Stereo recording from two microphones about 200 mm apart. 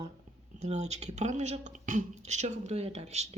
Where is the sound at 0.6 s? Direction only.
35° right (ahead or behind).